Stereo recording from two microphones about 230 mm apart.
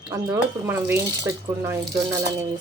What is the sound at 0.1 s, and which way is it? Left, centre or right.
Speech, centre.